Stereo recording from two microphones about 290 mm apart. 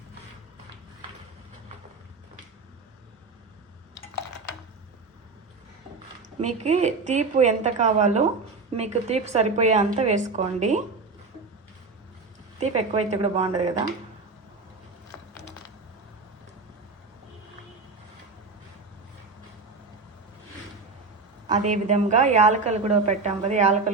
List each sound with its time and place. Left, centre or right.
6.4 s a woman's voice: right
12.5 s a woman's voice: right
21.7 s a woman's voice: right